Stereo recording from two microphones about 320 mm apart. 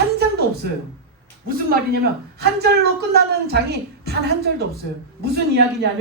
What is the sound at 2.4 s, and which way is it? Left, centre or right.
A woman's voice, right.